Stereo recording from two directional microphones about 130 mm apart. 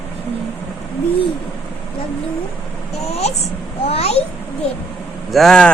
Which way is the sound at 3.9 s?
50° left (ahead or behind).